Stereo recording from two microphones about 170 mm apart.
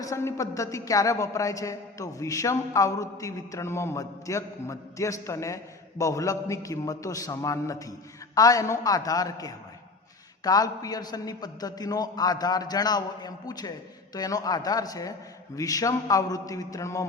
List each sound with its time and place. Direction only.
0.0 s a woman's voice: 20° left (ahead or behind)